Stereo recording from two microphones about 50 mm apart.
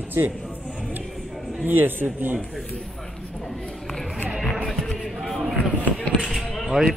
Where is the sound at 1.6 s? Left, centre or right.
Right.